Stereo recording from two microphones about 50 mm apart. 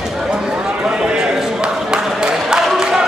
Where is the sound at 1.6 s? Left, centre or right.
Centre.